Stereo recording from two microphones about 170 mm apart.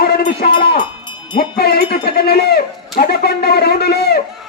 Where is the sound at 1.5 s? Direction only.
70° left (ahead or behind).